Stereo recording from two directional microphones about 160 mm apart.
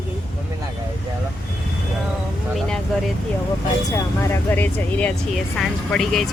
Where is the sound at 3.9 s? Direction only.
15° left (ahead or behind).